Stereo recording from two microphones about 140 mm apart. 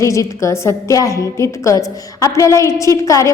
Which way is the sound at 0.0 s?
25° left (ahead or behind).